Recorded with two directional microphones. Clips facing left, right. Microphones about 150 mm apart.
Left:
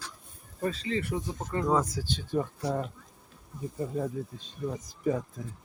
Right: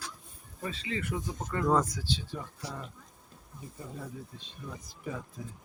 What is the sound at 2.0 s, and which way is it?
Speech, 50° left (ahead or behind).